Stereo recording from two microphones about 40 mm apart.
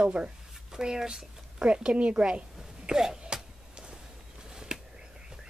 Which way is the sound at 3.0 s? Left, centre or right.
Centre.